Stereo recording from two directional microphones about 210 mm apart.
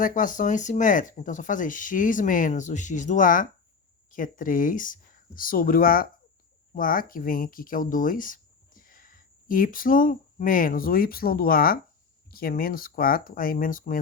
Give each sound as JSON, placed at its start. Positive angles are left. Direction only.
{"t": 0.0, "sound": "speech", "side_deg": 40}